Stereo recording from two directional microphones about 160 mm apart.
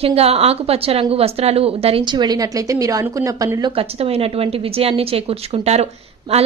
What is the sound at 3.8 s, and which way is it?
Speech, 40° right (ahead or behind).